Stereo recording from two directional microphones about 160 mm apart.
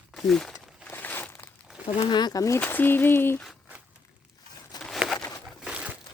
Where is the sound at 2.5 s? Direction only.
10° left (ahead or behind).